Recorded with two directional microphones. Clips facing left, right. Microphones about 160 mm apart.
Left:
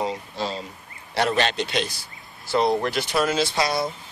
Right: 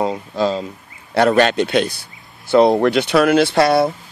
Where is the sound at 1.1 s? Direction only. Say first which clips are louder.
Right 9 dB; 55° right (ahead or behind).